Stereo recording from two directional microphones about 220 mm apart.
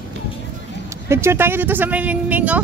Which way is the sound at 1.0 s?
10° right (ahead or behind).